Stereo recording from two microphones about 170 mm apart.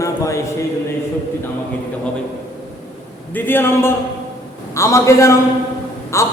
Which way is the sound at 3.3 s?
10° left (ahead or behind).